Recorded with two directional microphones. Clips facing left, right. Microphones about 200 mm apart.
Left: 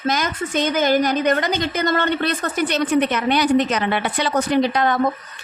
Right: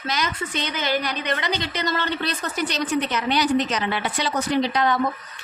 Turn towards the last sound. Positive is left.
turn(degrees=50)  # may be behind; listen again after turning